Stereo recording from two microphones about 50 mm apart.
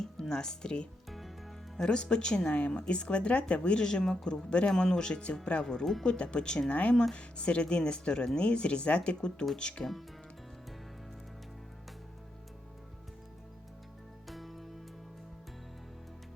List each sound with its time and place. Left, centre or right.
0.0 s speech: centre
5.8 s speech: centre
6.1 s speech: centre
14.3 s music: centre